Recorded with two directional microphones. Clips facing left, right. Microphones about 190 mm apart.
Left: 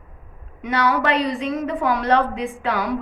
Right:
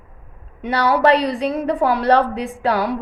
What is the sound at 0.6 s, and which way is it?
A woman's voice, 35° right (ahead or behind).